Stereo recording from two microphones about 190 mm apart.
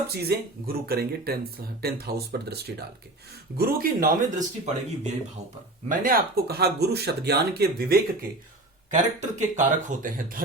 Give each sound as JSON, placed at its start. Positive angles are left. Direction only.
{"t": 0.1, "sound": "speech", "side_deg": -55}
{"t": 3.6, "sound": "speech", "side_deg": -45}
{"t": 9.2, "sound": "speech", "side_deg": -40}